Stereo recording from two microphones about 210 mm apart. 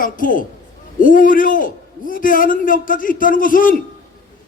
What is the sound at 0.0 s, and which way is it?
A man's voice, 40° left (ahead or behind).